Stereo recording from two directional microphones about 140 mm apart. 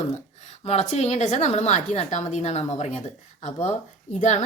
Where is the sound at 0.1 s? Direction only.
50° left (ahead or behind).